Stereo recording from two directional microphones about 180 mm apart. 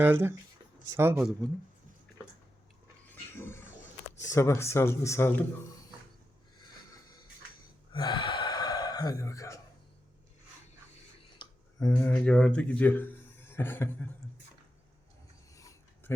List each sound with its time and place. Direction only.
0.0 s speech: 10° right (ahead or behind)
3.3 s speech: 15° left (ahead or behind)
7.9 s gasp: 25° left (ahead or behind)
11.3 s speech: 15° left (ahead or behind)
15.5 s mechanisms: 15° left (ahead or behind)